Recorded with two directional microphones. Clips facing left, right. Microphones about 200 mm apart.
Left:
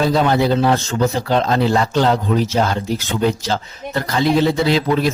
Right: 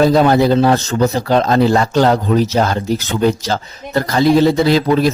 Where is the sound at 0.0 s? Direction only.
45° right (ahead or behind).